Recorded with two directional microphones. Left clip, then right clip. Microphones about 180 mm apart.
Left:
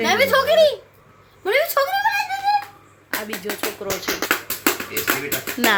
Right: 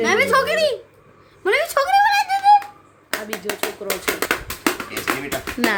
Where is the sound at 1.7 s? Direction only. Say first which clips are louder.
Right 2 dB; 15° right (ahead or behind).